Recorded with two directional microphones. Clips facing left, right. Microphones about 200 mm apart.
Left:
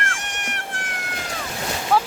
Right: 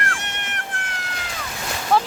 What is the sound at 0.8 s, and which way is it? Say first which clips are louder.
Cat: left 1 dB; 55° left (ahead or behind).